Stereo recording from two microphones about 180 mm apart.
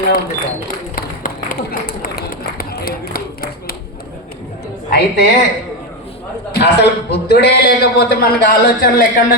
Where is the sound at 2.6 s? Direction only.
55° left (ahead or behind).